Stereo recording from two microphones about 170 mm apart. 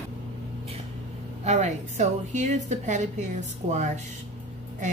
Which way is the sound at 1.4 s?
40° right (ahead or behind).